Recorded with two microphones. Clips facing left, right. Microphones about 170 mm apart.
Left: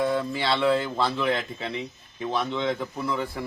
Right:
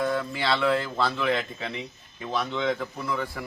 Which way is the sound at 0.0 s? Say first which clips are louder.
Left 2 dB; 25° left (ahead or behind).